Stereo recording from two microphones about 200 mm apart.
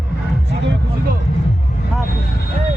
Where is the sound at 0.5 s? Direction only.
60° right (ahead or behind).